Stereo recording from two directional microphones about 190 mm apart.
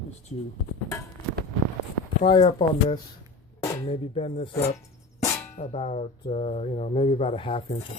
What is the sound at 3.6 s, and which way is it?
Music, 15° left (ahead or behind).